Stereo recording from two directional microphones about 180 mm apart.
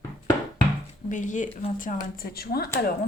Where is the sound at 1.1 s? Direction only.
45° left (ahead or behind).